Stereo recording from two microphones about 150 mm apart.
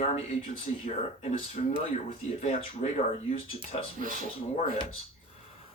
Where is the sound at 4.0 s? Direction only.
65° right (ahead or behind).